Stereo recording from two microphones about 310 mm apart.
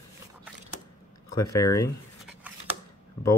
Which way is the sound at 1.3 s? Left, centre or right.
Centre.